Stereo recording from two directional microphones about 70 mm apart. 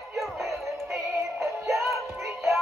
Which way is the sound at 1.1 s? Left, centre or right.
Right.